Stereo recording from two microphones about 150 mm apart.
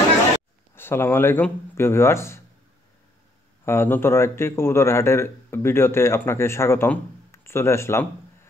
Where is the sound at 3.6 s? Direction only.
15° left (ahead or behind).